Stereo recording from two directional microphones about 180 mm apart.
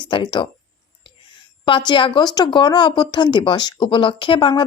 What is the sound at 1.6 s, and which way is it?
Speech, 25° left (ahead or behind).